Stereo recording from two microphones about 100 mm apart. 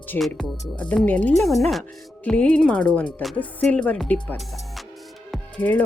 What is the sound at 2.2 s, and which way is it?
Speech, 10° left (ahead or behind).